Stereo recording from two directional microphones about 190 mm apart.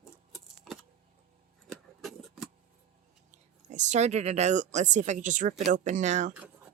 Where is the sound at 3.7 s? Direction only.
40° right (ahead or behind).